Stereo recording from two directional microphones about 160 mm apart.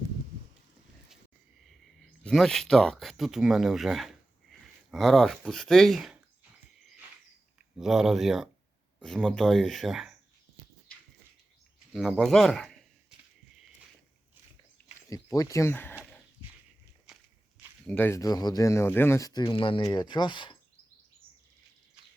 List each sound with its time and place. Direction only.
1.6 s speech: centre (ahead or behind)
7.8 s speech: 5° right (ahead or behind)
11.9 s a man's voice: centre (ahead or behind)
15.1 s speech: 20° left (ahead or behind)
17.8 s speech: 10° left (ahead or behind); by 20.6 s 30° left (ahead or behind)